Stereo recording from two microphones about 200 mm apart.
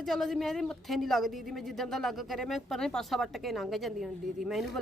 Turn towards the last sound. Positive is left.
turn(degrees=0)  # may be behind; listen again after turning